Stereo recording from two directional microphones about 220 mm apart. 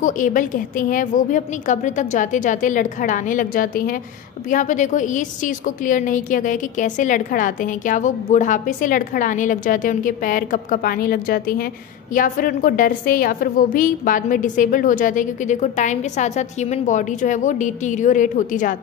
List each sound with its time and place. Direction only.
0.0 s a woman's voice: 35° left (ahead or behind)